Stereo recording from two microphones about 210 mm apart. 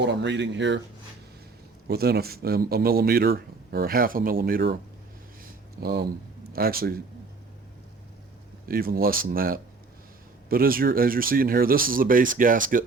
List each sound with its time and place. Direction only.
0.0 s speech: 55° right (ahead or behind)
1.9 s speech: 50° right (ahead or behind)
5.8 s speech: 50° right (ahead or behind)
8.6 s speech: 45° right (ahead or behind)